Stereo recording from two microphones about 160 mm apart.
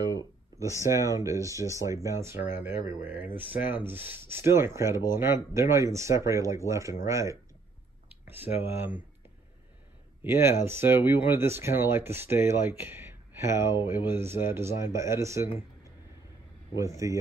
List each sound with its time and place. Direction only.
0.8 s speech: 20° right (ahead or behind)
10.2 s speech: 15° right (ahead or behind)
16.7 s speech: 20° right (ahead or behind)